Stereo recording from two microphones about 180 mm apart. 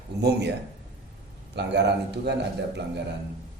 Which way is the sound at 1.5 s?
70° right (ahead or behind).